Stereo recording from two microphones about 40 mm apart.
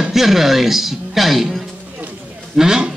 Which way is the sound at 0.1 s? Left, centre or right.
Centre.